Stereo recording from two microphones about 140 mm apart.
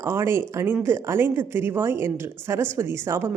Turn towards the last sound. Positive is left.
turn(degrees=-20)  # may be behind; listen again after turning